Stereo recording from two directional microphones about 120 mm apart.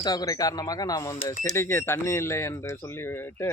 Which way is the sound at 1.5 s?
20° left (ahead or behind).